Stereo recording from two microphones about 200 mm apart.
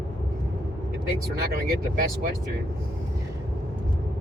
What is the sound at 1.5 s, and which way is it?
Speech, 50° right (ahead or behind).